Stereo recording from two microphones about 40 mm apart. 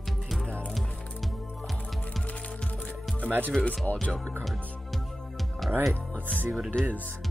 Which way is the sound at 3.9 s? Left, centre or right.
Left.